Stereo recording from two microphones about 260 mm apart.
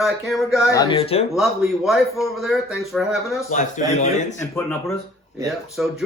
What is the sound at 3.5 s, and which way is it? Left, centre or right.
Speech, left.